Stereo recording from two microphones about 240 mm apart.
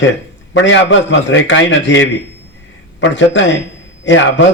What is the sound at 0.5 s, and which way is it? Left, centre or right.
A man's voice, left.